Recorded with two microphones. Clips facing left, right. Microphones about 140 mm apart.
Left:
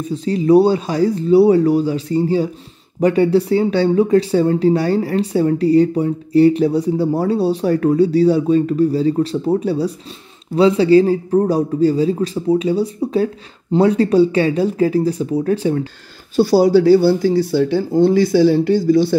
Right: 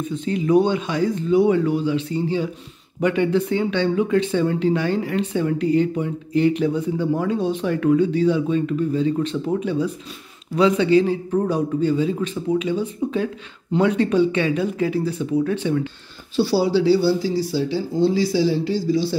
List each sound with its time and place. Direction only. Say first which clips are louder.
0.0 s speech: left 5 dB; 35° left (ahead or behind); by 19.1 s 55° left (ahead or behind)